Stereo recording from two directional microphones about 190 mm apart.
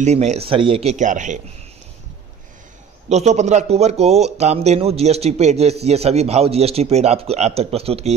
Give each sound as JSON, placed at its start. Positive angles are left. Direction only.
{"t": 0.0, "sound": "speech", "side_deg": -35}
{"t": 3.1, "sound": "speech", "side_deg": -35}